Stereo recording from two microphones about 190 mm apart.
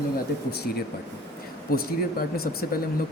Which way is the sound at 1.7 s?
55° left (ahead or behind).